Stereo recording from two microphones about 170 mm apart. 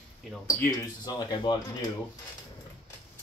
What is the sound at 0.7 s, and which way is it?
Speech, 25° left (ahead or behind).